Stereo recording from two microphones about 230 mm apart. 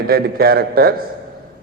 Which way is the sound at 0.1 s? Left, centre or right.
Right.